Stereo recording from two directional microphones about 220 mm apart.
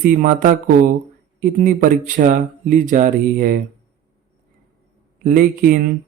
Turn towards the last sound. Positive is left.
turn(degrees=-40)  # may be behind; listen again after turning